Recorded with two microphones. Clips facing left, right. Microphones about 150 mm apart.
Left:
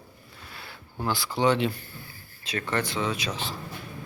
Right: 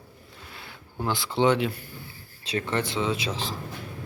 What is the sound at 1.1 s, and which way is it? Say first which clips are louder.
Speech: right 1 dB; 25° right (ahead or behind).